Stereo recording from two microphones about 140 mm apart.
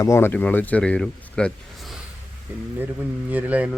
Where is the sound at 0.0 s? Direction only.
20° left (ahead or behind); by 2.0 s centre (ahead or behind).